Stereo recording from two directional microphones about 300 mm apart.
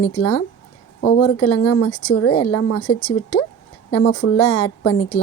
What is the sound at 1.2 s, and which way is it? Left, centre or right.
Speech, left.